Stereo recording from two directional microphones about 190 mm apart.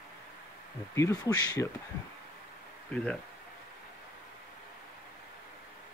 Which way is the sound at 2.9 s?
5° left (ahead or behind).